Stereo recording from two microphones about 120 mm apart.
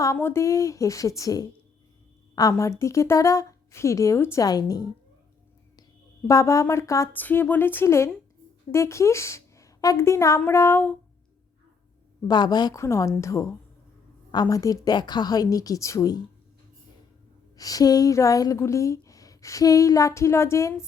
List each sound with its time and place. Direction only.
0.0 s a woman's voice: 20° left (ahead or behind)
6.2 s a woman's voice: 25° left (ahead or behind)
7.1 s a woman's voice: 15° left (ahead or behind)
12.3 s a woman's voice: 35° left (ahead or behind)
17.6 s a woman's voice: 30° left (ahead or behind)